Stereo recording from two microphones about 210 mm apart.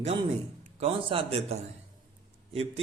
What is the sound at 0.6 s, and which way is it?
A man's voice, 25° right (ahead or behind).